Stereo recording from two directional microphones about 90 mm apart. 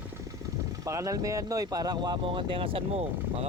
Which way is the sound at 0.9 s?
35° right (ahead or behind).